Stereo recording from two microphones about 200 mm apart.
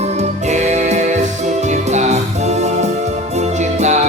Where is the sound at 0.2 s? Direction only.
35° right (ahead or behind).